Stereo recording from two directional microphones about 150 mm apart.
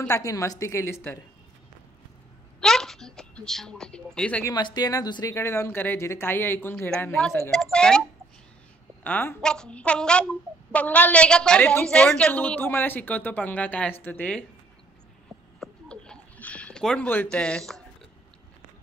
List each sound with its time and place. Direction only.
0.1 s a woman's voice: 20° left (ahead or behind)
2.6 s speech: 5° left (ahead or behind)
4.5 s a child's voice: 30° left (ahead or behind); by 8.0 s 5° left (ahead or behind)
9.0 s a child's voice: 10° left (ahead or behind)
15.6 s a sound: 5° left (ahead or behind)